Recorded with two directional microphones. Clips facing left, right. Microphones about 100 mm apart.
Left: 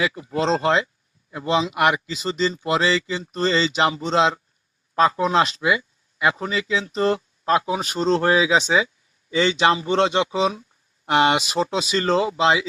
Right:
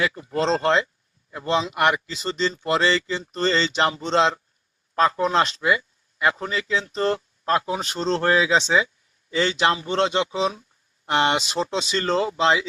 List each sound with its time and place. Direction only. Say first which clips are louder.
0.0 s speech: left 1 dB; 5° left (ahead or behind)